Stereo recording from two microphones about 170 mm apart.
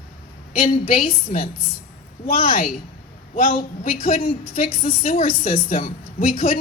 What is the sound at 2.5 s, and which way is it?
A woman's voice, 55° left (ahead or behind).